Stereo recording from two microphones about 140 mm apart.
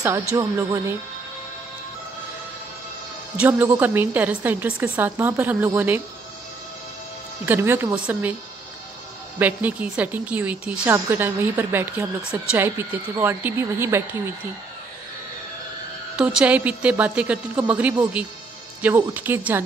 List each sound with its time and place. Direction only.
0.3 s speech: 20° right (ahead or behind)
3.3 s a woman's voice: 15° right (ahead or behind)
7.4 s a woman's voice: 15° right (ahead or behind)
9.4 s a woman's voice: 10° right (ahead or behind)
16.2 s a woman's voice: 10° right (ahead or behind)